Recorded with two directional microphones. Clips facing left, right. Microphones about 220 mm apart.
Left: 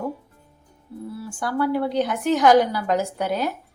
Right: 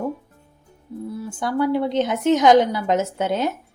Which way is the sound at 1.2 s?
20° right (ahead or behind).